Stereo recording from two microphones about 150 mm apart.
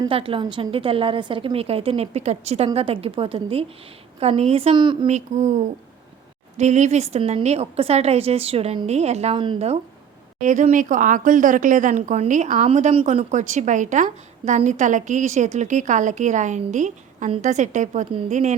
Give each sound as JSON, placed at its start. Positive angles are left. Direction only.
{"t": 0.1, "sound": "a woman's voice", "side_deg": -35}
{"t": 5.0, "sound": "a woman's voice", "side_deg": -50}
{"t": 6.6, "sound": "a woman's voice", "side_deg": -50}
{"t": 10.4, "sound": "a woman's voice", "side_deg": -55}